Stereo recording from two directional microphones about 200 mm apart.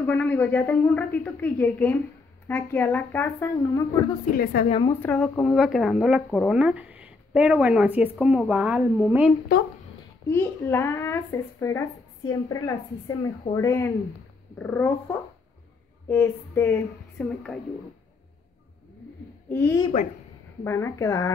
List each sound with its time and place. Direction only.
0.0 s a woman's voice: 5° left (ahead or behind)
4.4 s a woman's voice: 50° left (ahead or behind)
4.6 s a woman's voice: 30° left (ahead or behind)
5.0 s speech: centre (ahead or behind)
9.5 s a woman's voice: 45° left (ahead or behind)
10.3 s a woman's voice: 10° left (ahead or behind)
12.3 s a woman's voice: 15° left (ahead or behind)
16.1 s a woman's voice: 10° left (ahead or behind)
19.5 s a woman's voice: 10° left (ahead or behind)